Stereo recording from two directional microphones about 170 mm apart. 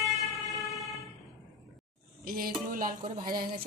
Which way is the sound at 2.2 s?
60° right (ahead or behind).